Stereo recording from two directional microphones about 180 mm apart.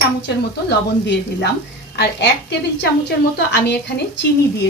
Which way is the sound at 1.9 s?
70° left (ahead or behind).